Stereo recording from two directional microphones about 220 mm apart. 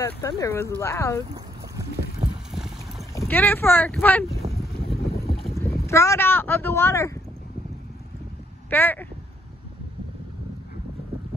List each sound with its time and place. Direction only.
0.0 s speech: 15° left (ahead or behind)
2.5 s boat: centre (ahead or behind)
3.2 s speech: 10° left (ahead or behind)
4.8 s boat: 45° left (ahead or behind)
5.3 s rowboat: centre (ahead or behind)
5.9 s speech: 15° left (ahead or behind)
8.6 s speech: 10° left (ahead or behind)